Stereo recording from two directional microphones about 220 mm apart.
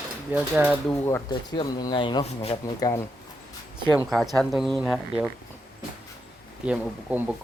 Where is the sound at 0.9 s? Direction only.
10° left (ahead or behind).